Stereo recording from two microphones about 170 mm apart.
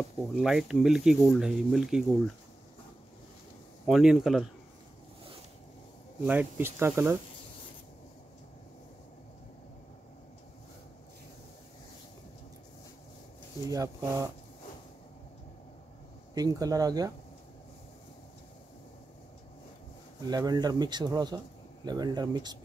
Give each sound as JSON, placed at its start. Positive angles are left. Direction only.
{"t": 0.3, "sound": "speech", "side_deg": 0}
{"t": 3.8, "sound": "speech", "side_deg": 0}
{"t": 6.2, "sound": "speech", "side_deg": -10}
{"t": 13.7, "sound": "speech", "side_deg": -20}
{"t": 16.3, "sound": "speech", "side_deg": -20}
{"t": 20.2, "sound": "speech", "side_deg": -25}